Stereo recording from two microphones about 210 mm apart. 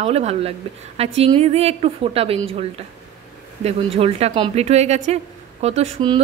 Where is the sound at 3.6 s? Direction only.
30° right (ahead or behind).